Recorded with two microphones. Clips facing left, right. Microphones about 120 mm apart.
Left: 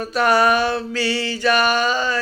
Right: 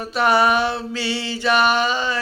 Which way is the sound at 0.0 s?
20° right (ahead or behind).